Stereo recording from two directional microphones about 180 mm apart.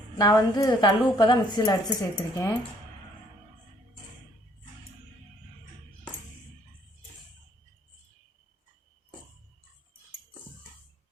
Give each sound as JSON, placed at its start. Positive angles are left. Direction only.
{"t": 0.2, "sound": "a woman's voice", "side_deg": 20}